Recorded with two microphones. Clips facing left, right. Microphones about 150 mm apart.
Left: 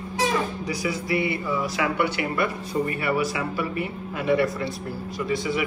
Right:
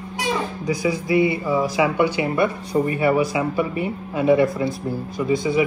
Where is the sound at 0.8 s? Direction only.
20° right (ahead or behind).